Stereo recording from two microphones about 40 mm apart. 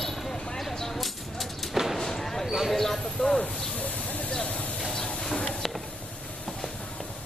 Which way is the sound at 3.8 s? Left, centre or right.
Left.